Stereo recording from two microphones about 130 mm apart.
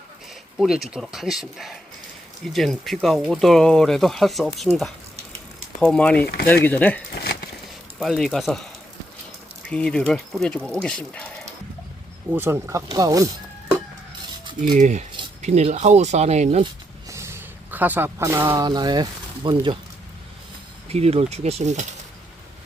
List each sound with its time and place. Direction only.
0.6 s speech: centre (ahead or behind)
5.8 s speech: 10° left (ahead or behind)
7.9 s speech: centre (ahead or behind)
9.6 s speech: 5° left (ahead or behind)
12.3 s speech: 20° right (ahead or behind)
14.8 s speech: 60° right (ahead or behind)
17.1 s a sound: 20° right (ahead or behind)
18.6 s speech: 30° right (ahead or behind)
20.9 s speech: 55° right (ahead or behind)